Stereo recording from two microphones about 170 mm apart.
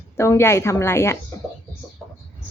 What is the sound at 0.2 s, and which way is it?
Speech, 15° left (ahead or behind).